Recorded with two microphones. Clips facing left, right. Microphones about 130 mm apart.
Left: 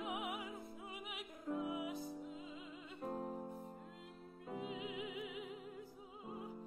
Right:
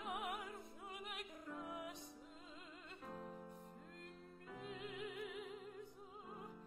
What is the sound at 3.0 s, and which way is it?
Music, 35° left (ahead or behind).